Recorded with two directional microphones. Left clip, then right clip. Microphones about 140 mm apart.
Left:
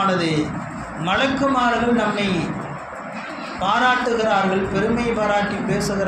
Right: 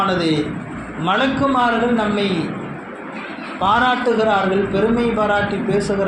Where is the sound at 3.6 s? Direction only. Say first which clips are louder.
Right 2 dB; 25° right (ahead or behind).